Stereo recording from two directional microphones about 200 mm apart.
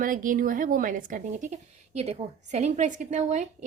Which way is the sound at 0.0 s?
40° right (ahead or behind).